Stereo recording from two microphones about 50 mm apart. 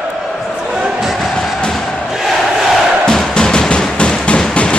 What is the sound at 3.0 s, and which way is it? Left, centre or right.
Music, centre.